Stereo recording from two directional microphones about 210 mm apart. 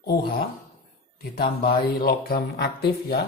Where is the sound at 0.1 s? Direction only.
45° left (ahead or behind).